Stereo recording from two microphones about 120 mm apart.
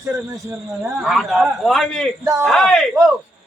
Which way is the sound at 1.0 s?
Centre (ahead or behind).